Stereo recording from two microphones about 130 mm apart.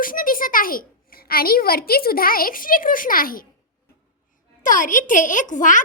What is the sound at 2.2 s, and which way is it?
A woman's voice, 90° left.